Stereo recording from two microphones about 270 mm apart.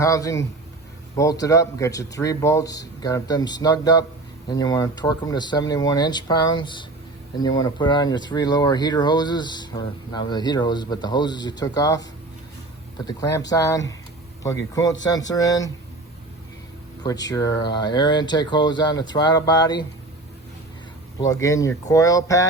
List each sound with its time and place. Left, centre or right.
0.0 s speech: centre
13.1 s speech: centre
17.0 s speech: centre
21.2 s speech: centre